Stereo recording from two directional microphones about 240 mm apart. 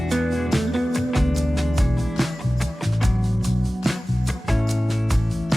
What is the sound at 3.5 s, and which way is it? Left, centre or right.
Music, centre.